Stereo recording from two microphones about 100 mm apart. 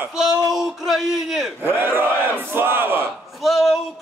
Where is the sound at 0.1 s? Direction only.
5° right (ahead or behind).